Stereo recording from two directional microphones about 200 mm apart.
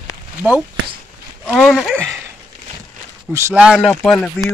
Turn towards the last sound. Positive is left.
turn(degrees=5)  # may be behind; listen again after turning